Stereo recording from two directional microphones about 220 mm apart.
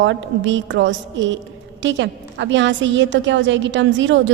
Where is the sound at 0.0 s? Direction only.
55° right (ahead or behind).